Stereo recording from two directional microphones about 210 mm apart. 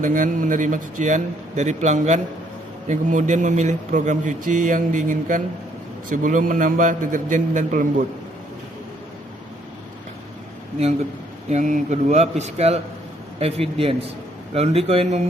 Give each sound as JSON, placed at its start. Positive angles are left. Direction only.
{"t": 0.0, "sound": "speech", "side_deg": -40}
{"t": 11.4, "sound": "a man's voice", "side_deg": -35}